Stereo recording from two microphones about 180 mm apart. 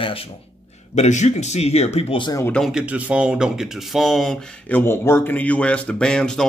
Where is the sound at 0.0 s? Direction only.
30° left (ahead or behind).